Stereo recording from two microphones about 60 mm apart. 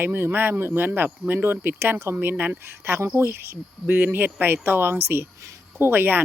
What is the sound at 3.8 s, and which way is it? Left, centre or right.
Speech, right.